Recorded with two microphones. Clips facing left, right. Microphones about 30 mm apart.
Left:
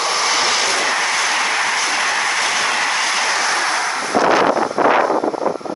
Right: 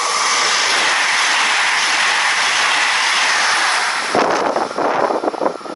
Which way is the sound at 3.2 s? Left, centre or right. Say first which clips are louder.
Right 3 dB; right.